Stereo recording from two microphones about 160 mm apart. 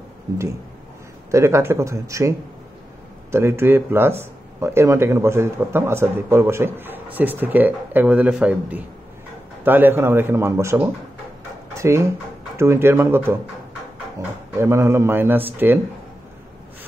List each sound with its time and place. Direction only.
1.3 s speech: 15° right (ahead or behind)
14.6 s speech: 15° right (ahead or behind)